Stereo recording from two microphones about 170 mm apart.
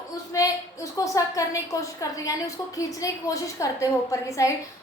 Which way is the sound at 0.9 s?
20° left (ahead or behind).